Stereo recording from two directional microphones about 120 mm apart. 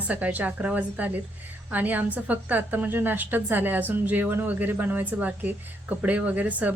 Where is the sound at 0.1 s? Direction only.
15° right (ahead or behind).